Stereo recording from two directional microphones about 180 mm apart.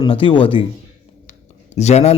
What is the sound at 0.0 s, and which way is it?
A man's voice, 30° left (ahead or behind).